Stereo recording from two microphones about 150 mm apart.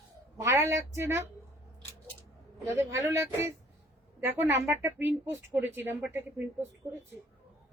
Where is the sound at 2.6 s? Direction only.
20° right (ahead or behind).